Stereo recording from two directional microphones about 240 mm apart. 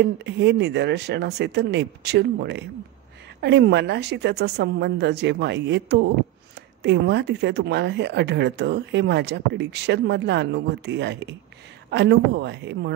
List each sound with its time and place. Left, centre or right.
0.0 s speech: right